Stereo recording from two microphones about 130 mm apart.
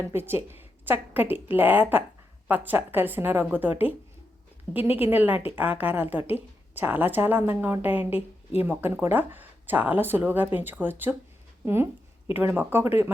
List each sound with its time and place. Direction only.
0.0 s a woman's voice: 20° right (ahead or behind)